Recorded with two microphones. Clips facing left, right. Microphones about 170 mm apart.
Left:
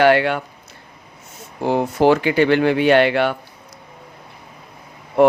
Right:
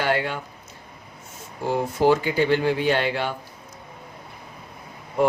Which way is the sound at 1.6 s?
75° left (ahead or behind).